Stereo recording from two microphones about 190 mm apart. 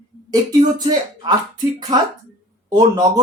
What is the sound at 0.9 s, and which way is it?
Speech, 20° right (ahead or behind).